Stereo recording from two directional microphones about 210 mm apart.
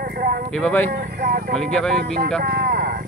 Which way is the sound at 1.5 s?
5° left (ahead or behind).